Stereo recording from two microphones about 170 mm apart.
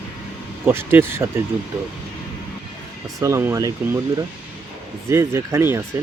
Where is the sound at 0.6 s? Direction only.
15° right (ahead or behind).